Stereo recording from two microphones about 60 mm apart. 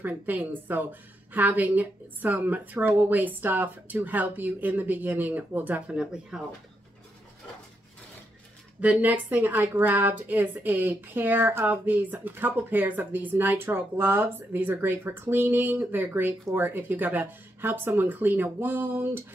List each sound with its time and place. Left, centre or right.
0.0 s speech: right
5.9 s speech: centre
8.8 s speech: right